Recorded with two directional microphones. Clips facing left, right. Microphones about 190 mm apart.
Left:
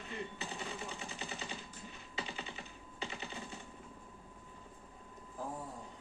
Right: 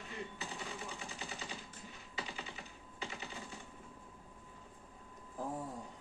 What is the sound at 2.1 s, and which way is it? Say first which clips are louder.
Music: left 2 dB; 25° left (ahead or behind).